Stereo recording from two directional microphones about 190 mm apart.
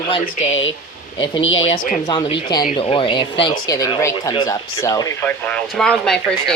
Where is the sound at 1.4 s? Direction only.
90° left.